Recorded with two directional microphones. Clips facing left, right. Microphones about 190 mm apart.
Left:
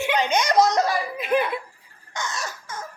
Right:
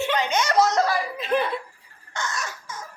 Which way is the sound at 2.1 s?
15° left (ahead or behind).